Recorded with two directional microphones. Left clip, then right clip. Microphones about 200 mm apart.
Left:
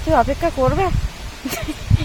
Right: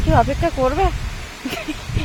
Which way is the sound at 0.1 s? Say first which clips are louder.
Left 1 dB; 5° left (ahead or behind).